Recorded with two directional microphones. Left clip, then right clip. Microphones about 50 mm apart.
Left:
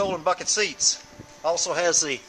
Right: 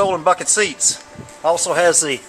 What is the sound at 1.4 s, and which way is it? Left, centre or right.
Speech, left.